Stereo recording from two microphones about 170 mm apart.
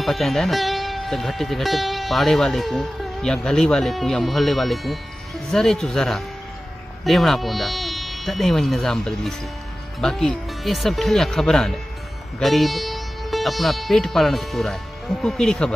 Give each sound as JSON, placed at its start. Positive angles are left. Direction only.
{"t": 0.0, "sound": "speech", "side_deg": 0}